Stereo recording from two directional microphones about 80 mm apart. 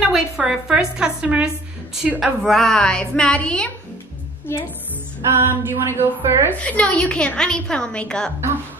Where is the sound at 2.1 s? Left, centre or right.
Centre.